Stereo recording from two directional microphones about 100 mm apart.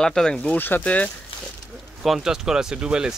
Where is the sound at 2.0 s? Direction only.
5° right (ahead or behind).